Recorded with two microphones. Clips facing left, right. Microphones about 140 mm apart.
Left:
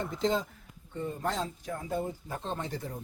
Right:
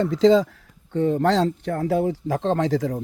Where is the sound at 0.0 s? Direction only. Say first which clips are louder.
Right 14 dB; 90° right.